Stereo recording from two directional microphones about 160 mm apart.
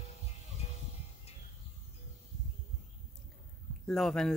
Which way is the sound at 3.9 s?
5° left (ahead or behind).